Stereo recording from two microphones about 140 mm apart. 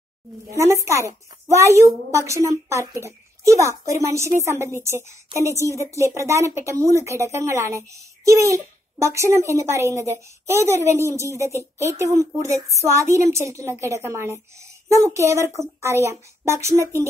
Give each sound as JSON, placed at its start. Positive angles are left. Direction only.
{"t": 0.5, "sound": "a woman's voice", "side_deg": -20}